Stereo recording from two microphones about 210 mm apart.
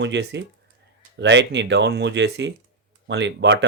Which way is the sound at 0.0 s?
55° right (ahead or behind).